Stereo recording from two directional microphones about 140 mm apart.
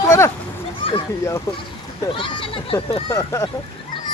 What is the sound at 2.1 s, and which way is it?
Speech, 35° left (ahead or behind).